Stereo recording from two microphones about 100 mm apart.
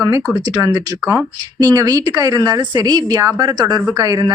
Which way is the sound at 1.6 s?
40° right (ahead or behind).